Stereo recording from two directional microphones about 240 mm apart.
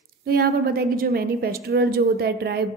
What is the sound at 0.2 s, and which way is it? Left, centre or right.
A woman's voice, right.